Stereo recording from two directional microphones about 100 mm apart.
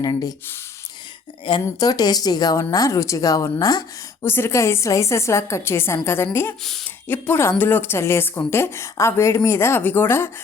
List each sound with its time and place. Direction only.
0.0 s speech: 40° left (ahead or behind)
1.5 s speech: 55° left (ahead or behind)
1.8 s a woman's voice: 40° left (ahead or behind)
4.2 s a woman's voice: 25° left (ahead or behind)
6.6 s speech: 5° left (ahead or behind)
7.1 s a woman's voice: 20° left (ahead or behind)